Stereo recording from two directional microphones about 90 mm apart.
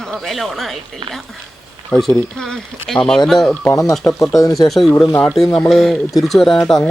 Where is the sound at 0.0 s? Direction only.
5° left (ahead or behind).